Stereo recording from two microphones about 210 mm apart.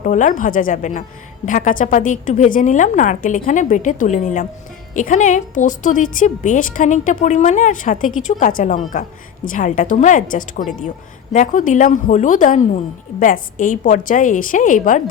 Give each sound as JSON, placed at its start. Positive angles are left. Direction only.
{"t": 0.0, "sound": "a woman's voice", "side_deg": 35}